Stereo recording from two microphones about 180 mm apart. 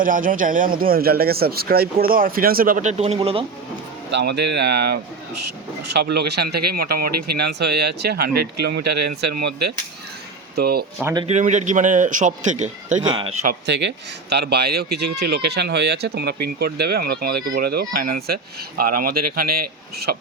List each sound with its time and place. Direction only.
0.0 s speech: 50° right (ahead or behind); by 3.4 s 30° right (ahead or behind)
4.1 s speech: 70° right (ahead or behind)
11.0 s speech: 25° right (ahead or behind)
11.3 s speech: 40° right (ahead or behind)
13.0 s speech: 25° right (ahead or behind)
13.7 s speech: 70° right (ahead or behind)